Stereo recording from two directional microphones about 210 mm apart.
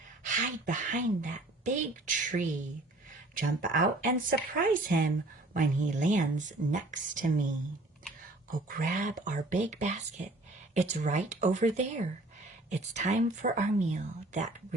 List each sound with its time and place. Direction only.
0.3 s speech: 40° right (ahead or behind)
12.7 s speech: 35° right (ahead or behind)